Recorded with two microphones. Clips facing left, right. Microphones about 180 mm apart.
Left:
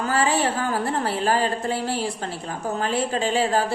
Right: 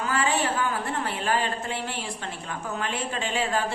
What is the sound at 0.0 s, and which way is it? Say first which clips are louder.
A woman's voice: left 4 dB; 35° left (ahead or behind).